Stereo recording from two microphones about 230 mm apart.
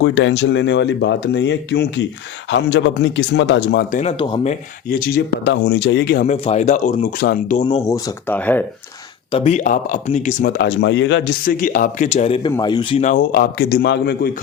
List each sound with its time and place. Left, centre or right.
0.0 s speech: left
3.9 s speech: left
4.9 s speech: left
6.2 s speech: left
7.9 s speech: centre
9.3 s speech: left
10.6 s speech: left